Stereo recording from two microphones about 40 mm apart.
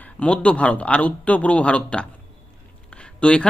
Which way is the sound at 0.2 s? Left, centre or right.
Left.